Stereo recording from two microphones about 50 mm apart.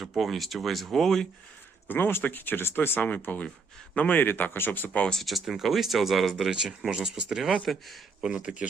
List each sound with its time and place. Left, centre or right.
0.2 s speech: centre
1.9 s a man's voice: left
5.2 s speech: centre
6.5 s speech: centre
8.2 s speech: centre